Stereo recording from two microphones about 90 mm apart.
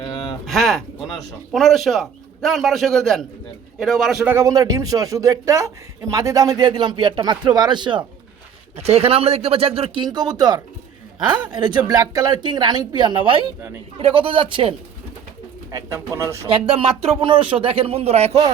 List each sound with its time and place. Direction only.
0.4 s a man's voice: centre (ahead or behind)
4.4 s a man's voice: 40° right (ahead or behind); by 8.0 s 60° right (ahead or behind)
9.0 s speech: 90° right
10.0 s a woman's voice: 50° right (ahead or behind); by 13.5 s 75° right (ahead or behind)
14.0 s a man's voice: 90° right; by 14.8 s 70° right (ahead or behind)
15.7 s a man's voice: 30° right (ahead or behind)
16.5 s speech: 90° right